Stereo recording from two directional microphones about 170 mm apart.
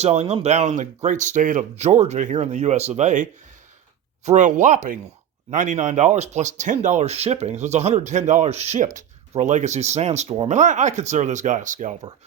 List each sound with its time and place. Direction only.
0.0 s speech: 40° right (ahead or behind)
10.6 s speech: 45° right (ahead or behind)